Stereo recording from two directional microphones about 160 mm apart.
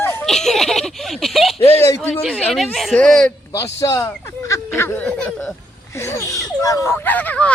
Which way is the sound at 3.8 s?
20° left (ahead or behind).